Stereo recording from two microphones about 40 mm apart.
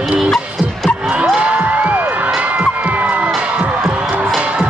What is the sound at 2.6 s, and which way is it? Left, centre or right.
Crowd, right.